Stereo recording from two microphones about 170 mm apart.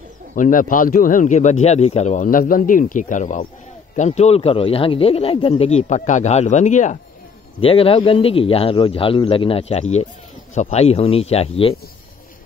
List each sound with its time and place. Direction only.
0.4 s speech: 50° left (ahead or behind)
7.6 s speech: 35° left (ahead or behind)